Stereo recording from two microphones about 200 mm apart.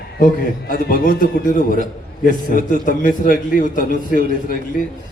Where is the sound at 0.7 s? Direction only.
45° left (ahead or behind).